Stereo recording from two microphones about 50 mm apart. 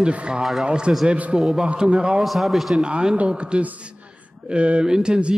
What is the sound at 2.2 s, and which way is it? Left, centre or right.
Speech, centre.